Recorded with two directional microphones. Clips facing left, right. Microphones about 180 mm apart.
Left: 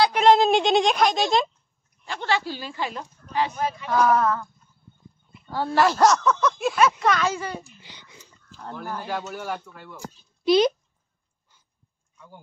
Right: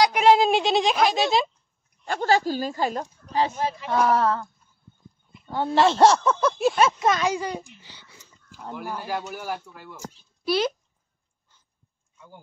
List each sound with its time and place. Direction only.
0.0 s a sound: 10° right (ahead or behind)
2.0 s speech: 45° right (ahead or behind)
5.5 s speech: 20° right (ahead or behind)
7.8 s speech: 15° left (ahead or behind)
8.5 s speech: 10° right (ahead or behind)
10.4 s a child's voice: 20° left (ahead or behind)